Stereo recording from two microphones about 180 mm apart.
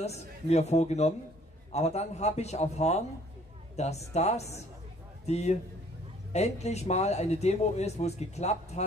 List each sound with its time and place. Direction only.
0.0 s a man's voice: 35° left (ahead or behind)